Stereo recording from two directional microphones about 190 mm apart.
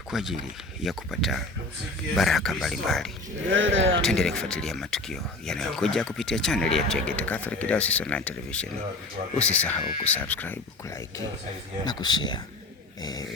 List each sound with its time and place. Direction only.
0.1 s speech: centre (ahead or behind)
3.5 s speech: 85° right
4.0 s speech: centre (ahead or behind); by 13.2 s 20° left (ahead or behind)